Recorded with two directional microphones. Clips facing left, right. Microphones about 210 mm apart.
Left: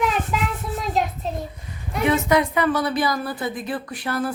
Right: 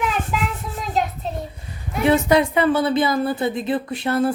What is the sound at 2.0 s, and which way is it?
A woman's voice, 30° right (ahead or behind).